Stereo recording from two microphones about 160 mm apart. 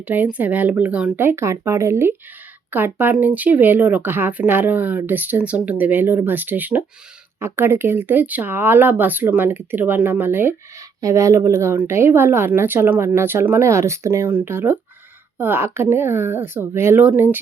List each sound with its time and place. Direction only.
0.1 s speech: 10° right (ahead or behind)